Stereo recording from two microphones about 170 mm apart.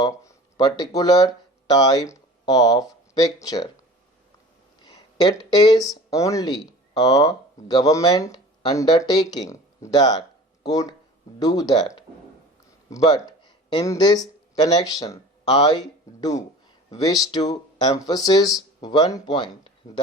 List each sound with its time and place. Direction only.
0.0 s speech: 20° left (ahead or behind)
4.8 s speech: 25° left (ahead or behind)